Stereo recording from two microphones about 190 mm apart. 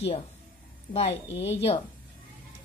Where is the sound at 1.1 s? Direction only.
70° left (ahead or behind).